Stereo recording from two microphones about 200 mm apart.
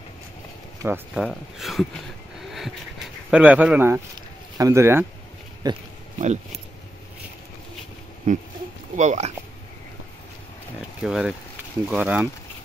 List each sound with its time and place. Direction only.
0.8 s speech: 10° right (ahead or behind)
1.2 s speech: centre (ahead or behind)
3.3 s speech: 5° right (ahead or behind)
6.1 s speech: 35° right (ahead or behind)
8.3 s speech: 35° right (ahead or behind)
11.0 s speech: 5° right (ahead or behind)